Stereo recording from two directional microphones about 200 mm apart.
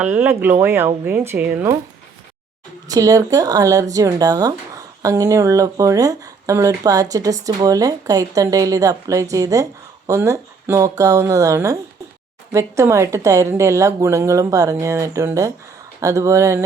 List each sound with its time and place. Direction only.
0.0 s speech: 10° right (ahead or behind)
2.9 s speech: 15° right (ahead or behind)